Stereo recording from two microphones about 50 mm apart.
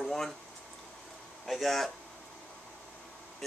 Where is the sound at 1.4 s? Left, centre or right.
Centre.